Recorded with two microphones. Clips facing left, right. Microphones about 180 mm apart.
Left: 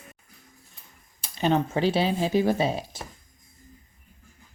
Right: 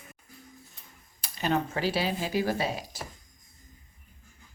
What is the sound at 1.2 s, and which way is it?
Speech, 25° left (ahead or behind).